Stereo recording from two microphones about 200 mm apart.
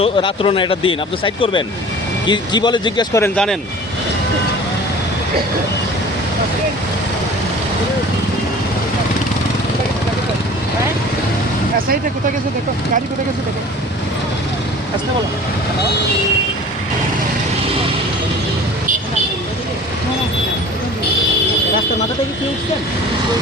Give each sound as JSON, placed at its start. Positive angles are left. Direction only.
{"t": 0.0, "sound": "speech", "side_deg": 25}